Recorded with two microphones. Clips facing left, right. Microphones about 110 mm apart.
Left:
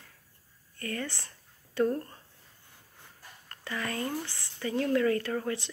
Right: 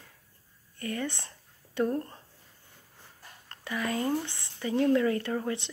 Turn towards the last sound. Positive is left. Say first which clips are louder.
# even
turn(degrees=-20)  # may be behind; listen again after turning